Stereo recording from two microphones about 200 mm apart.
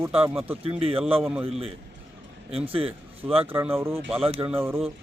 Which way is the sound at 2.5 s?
30° right (ahead or behind).